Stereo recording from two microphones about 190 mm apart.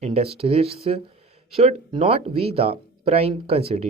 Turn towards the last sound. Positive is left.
turn(degrees=-30)  # may be behind; listen again after turning